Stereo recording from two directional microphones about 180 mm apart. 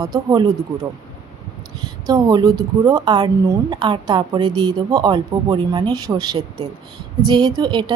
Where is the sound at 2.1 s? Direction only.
20° right (ahead or behind).